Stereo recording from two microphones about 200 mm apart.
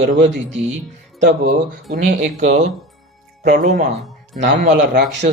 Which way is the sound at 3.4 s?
45° right (ahead or behind).